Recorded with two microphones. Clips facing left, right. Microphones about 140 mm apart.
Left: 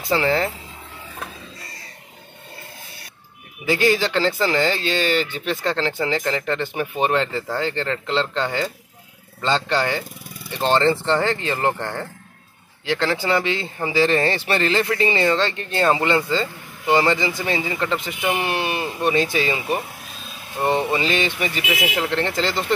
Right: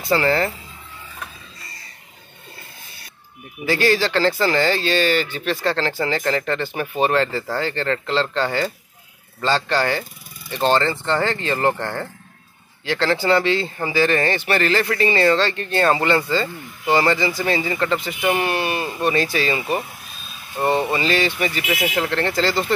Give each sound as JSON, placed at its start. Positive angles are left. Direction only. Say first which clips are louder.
{"t": 0.1, "sound": "speech", "louder": "right 1 dB", "side_deg": 15}
{"t": 3.6, "sound": "speech", "louder": "even", "side_deg": 20}
{"t": 20.9, "sound": "speech", "louder": "right 1 dB", "side_deg": 20}